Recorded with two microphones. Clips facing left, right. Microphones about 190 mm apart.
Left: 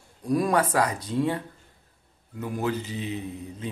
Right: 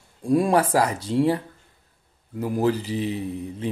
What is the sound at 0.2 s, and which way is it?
Speech, 30° right (ahead or behind).